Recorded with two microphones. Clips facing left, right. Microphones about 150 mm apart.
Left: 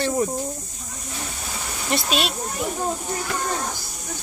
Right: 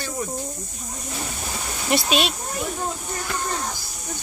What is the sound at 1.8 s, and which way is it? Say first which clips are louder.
Speech: right 2 dB; 5° right (ahead or behind).